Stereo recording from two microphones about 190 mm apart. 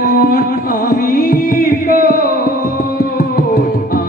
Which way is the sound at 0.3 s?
50° left (ahead or behind).